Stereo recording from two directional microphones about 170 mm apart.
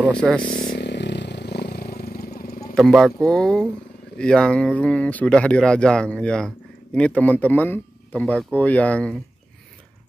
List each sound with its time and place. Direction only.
0.1 s speech: 5° left (ahead or behind)
0.4 s vehicle: 55° left (ahead or behind)
2.7 s speech: centre (ahead or behind)